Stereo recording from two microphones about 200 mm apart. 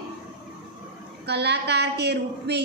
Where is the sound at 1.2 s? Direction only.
55° right (ahead or behind).